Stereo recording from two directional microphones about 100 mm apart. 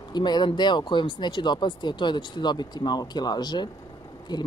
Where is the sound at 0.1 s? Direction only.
45° left (ahead or behind).